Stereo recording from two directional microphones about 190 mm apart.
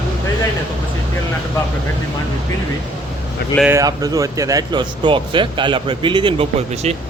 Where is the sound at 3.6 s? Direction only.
15° right (ahead or behind).